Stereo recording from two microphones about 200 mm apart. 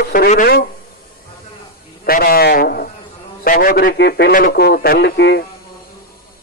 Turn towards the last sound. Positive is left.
turn(degrees=55)  # may be behind; listen again after turning